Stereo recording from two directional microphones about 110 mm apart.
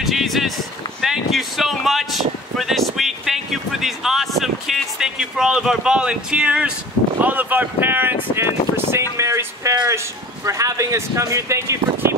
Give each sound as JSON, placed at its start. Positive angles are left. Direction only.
{"t": 0.0, "sound": "a man's voice", "side_deg": 0}